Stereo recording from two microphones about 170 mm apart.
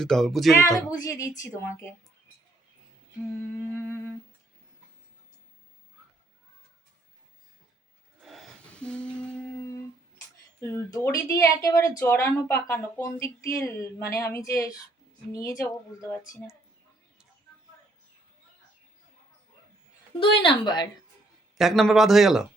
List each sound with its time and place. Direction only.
0.0 s speech: centre (ahead or behind)
0.9 s speech: 20° left (ahead or behind)
3.3 s speech: 15° left (ahead or behind)
8.2 s a sound: centre (ahead or behind)
10.6 s speech: 15° left (ahead or behind)
20.1 s speech: 30° left (ahead or behind)
21.6 s speech: centre (ahead or behind)